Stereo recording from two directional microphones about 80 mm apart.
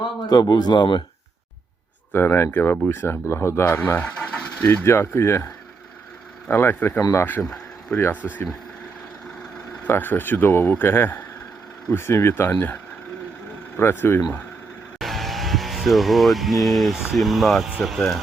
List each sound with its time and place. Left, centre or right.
0.3 s speech: left
2.1 s speech: left
4.0 s vehicle: centre
4.6 s speech: left
6.5 s speech: left
7.9 s speech: left
9.8 s speech: left
13.7 s speech: left
14.9 s speech: centre